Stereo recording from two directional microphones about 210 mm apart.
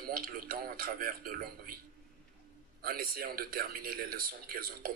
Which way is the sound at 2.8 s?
45° right (ahead or behind).